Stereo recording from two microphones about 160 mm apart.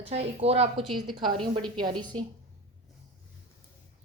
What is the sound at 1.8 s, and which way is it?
Speech, 25° right (ahead or behind).